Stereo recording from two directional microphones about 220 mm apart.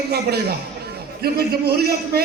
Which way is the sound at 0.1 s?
45° right (ahead or behind).